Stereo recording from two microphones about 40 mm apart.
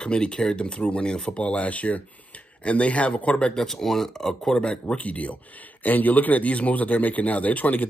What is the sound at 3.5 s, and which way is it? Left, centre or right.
Speech, centre.